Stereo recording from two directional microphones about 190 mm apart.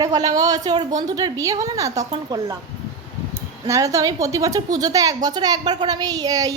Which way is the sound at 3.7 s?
20° right (ahead or behind).